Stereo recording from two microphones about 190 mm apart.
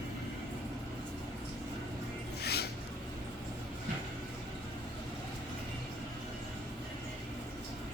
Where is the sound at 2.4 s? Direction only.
60° left (ahead or behind).